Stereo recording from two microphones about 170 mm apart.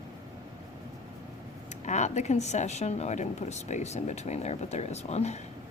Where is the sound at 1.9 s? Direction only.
45° left (ahead or behind).